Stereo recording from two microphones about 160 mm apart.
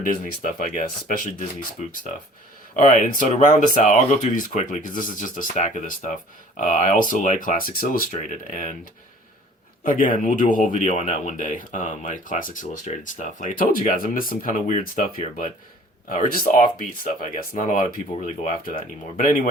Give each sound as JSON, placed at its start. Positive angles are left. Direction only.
{"t": 0.0, "sound": "speech", "side_deg": 60}
{"t": 2.7, "sound": "speech", "side_deg": 50}